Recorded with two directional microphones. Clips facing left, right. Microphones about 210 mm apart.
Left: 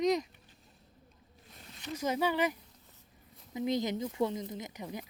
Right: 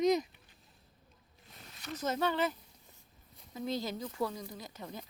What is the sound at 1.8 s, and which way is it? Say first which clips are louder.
Speech: left 2 dB; 10° left (ahead or behind).